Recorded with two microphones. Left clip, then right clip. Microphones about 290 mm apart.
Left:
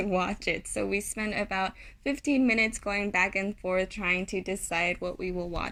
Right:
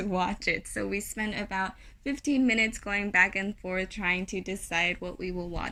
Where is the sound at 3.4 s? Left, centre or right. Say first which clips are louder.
Left 4 dB; left.